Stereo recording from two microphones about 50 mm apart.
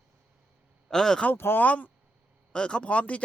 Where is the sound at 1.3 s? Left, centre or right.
Left.